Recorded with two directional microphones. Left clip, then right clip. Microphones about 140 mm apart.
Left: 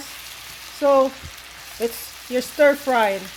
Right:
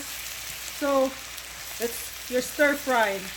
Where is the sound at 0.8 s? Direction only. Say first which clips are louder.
Left 9 dB; 35° left (ahead or behind).